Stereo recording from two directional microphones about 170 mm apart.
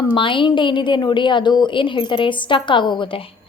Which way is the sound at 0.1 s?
30° left (ahead or behind).